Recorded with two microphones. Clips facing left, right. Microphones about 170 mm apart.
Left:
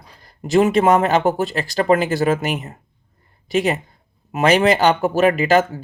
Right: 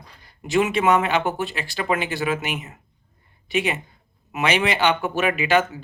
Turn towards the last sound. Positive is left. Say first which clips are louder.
# left 4 dB
turn(degrees=40)  # may be behind; listen again after turning